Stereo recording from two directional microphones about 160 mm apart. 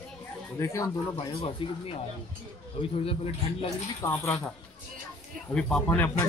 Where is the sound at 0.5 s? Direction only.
20° left (ahead or behind).